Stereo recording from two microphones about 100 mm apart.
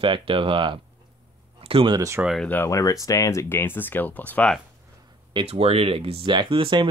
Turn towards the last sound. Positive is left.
turn(degrees=-55)  # may be behind; listen again after turning